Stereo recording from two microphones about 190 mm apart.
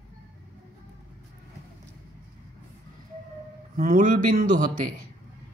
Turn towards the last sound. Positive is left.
turn(degrees=-45)  # may be behind; listen again after turning